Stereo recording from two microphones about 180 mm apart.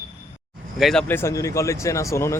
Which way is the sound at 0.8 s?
5° left (ahead or behind).